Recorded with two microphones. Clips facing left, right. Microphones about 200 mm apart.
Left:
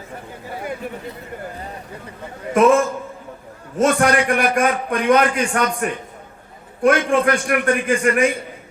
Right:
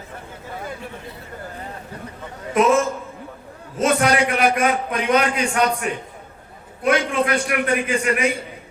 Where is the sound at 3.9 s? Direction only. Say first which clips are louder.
Even; 50° left (ahead or behind).